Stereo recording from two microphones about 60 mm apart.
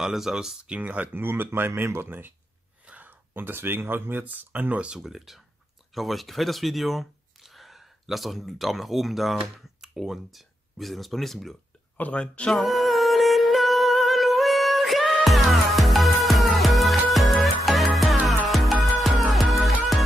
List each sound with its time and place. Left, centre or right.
0.0 s speech: centre
0.7 s speech: right
4.8 s speech: centre
12.0 s speech: left
12.5 s humming: centre